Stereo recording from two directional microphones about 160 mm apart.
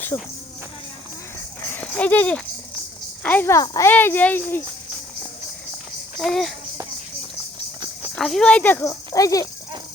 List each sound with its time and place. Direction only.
0.1 s speech: 25° left (ahead or behind)
1.6 s a sound: 10° left (ahead or behind)
3.2 s speech: 15° left (ahead or behind)
6.1 s a child's voice: centre (ahead or behind)
8.1 s speech: 5° left (ahead or behind); by 9.5 s 20° left (ahead or behind)